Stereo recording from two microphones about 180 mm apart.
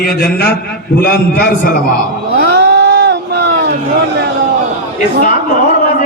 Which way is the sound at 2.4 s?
75° right (ahead or behind).